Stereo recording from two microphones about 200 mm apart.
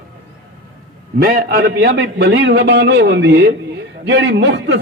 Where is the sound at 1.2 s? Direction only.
50° right (ahead or behind).